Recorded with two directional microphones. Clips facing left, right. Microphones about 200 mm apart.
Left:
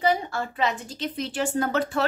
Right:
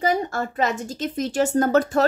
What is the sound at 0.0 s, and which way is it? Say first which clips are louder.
A woman's voice: right 2 dB; 45° right (ahead or behind).